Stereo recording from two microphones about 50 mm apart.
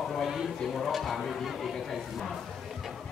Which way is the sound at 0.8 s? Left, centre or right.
Centre.